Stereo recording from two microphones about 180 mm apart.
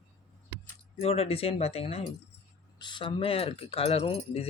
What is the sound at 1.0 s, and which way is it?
Speech, 35° left (ahead or behind).